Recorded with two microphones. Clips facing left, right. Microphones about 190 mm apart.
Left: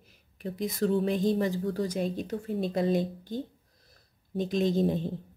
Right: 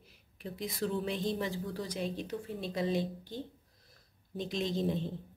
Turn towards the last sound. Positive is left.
turn(degrees=50)  # may be behind; listen again after turning